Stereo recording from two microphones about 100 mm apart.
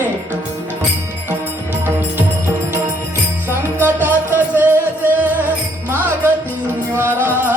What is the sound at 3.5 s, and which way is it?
Music, 20° right (ahead or behind).